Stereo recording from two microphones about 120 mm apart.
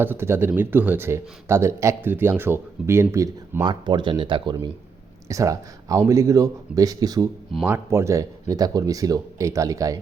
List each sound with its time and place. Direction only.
0.0 s a man's voice: 20° right (ahead or behind)
3.6 s speech: 40° right (ahead or behind)
5.3 s a man's voice: 25° right (ahead or behind)
7.6 s a man's voice: 20° right (ahead or behind)